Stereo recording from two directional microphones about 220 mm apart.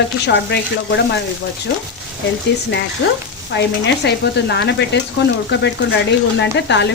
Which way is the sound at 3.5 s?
50° left (ahead or behind).